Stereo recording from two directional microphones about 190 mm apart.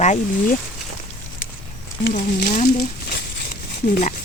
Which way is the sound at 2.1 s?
55° left (ahead or behind).